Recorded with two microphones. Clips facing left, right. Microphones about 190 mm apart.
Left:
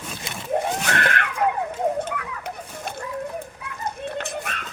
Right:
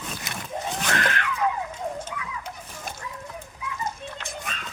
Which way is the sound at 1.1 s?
60° left (ahead or behind).